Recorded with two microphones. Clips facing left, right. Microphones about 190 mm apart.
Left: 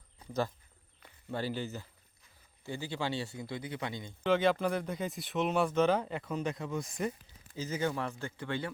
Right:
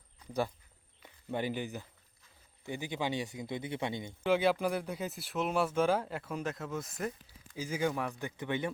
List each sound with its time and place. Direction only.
1.3 s speech: 15° right (ahead or behind)
4.2 s speech: 10° right (ahead or behind)